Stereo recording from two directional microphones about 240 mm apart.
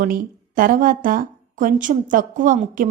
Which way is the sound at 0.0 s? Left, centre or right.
Right.